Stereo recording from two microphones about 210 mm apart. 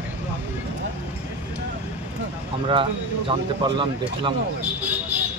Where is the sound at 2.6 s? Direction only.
25° right (ahead or behind).